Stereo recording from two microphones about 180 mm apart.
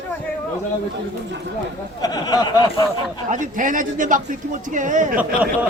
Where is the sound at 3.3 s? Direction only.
45° right (ahead or behind).